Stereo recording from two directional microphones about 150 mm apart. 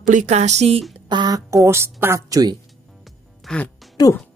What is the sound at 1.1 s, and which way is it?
A woman's voice, 30° right (ahead or behind).